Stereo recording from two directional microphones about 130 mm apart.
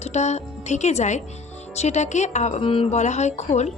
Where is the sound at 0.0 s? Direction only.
60° left (ahead or behind).